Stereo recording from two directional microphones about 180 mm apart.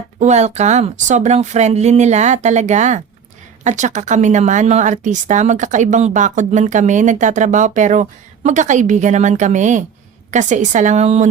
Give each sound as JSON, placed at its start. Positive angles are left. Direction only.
{"t": 0.2, "sound": "speech", "side_deg": -40}